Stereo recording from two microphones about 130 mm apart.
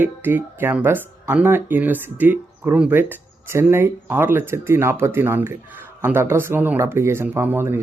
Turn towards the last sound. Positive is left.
turn(degrees=-15)  # may be behind; listen again after turning